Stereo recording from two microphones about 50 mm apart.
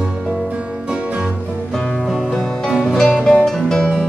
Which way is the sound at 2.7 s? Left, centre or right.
Centre.